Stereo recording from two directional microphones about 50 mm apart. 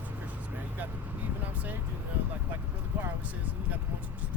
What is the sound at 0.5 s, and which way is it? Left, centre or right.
Vehicle, right.